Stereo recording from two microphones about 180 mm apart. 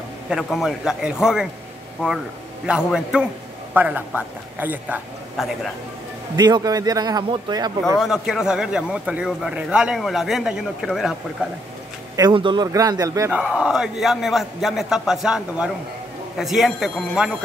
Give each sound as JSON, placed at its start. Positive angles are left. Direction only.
{"t": 0.3, "sound": "speech", "side_deg": 0}
{"t": 2.6, "sound": "a man's voice", "side_deg": -5}
{"t": 6.3, "sound": "a man's voice", "side_deg": -25}
{"t": 8.0, "sound": "speech", "side_deg": -5}
{"t": 12.2, "sound": "a man's voice", "side_deg": -25}
{"t": 13.3, "sound": "speech", "side_deg": -5}